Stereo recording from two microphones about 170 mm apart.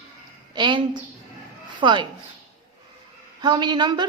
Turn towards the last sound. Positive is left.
turn(degrees=-25)  # may be behind; listen again after turning